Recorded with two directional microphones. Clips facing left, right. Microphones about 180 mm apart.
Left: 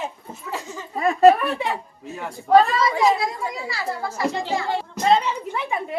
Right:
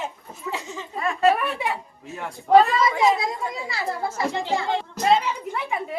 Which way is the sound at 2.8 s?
20° right (ahead or behind).